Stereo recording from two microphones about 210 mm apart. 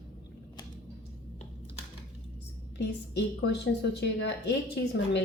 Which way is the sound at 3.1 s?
55° left (ahead or behind).